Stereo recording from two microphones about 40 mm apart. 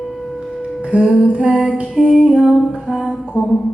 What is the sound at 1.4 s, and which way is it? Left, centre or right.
Music, centre.